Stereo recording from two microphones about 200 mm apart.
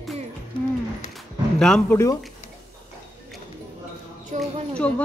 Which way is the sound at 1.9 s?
15° left (ahead or behind).